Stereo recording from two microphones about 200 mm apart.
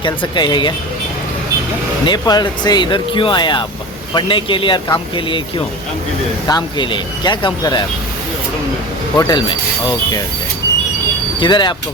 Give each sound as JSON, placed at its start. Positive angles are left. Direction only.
{"t": 0.0, "sound": "speech", "side_deg": 25}
{"t": 2.0, "sound": "speech", "side_deg": 20}
{"t": 9.1, "sound": "speech", "side_deg": 20}
{"t": 11.3, "sound": "speech", "side_deg": 25}